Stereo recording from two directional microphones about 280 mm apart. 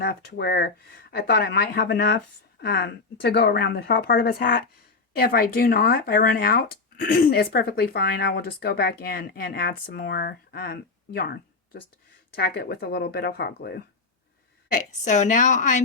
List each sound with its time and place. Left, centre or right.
0.0 s speech: left
15.0 s a woman's voice: left